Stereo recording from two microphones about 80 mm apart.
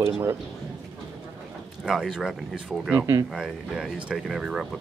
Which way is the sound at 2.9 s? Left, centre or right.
Right.